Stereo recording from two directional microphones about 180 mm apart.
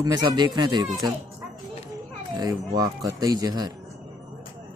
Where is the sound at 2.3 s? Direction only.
20° right (ahead or behind).